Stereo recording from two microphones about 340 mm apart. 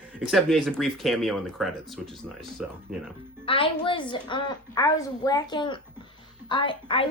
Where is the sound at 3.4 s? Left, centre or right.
Centre.